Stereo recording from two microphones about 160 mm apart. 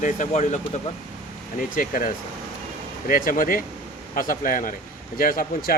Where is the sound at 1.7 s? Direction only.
60° left (ahead or behind).